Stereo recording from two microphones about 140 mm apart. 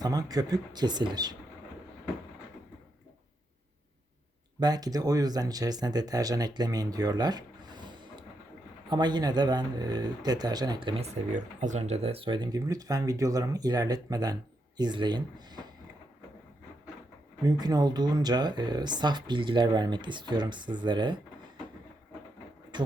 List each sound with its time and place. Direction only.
0.0 s speech: 25° right (ahead or behind)
4.6 s speech: 25° right (ahead or behind)
11.1 s speech: 60° right (ahead or behind); by 15.6 s 30° right (ahead or behind)
17.4 s speech: 30° right (ahead or behind)
22.7 s bee: 30° right (ahead or behind)